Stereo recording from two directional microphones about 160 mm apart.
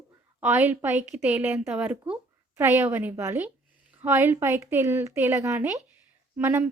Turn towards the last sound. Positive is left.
turn(degrees=-15)  # may be behind; listen again after turning